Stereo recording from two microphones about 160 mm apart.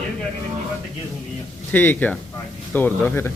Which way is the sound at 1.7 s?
10° left (ahead or behind).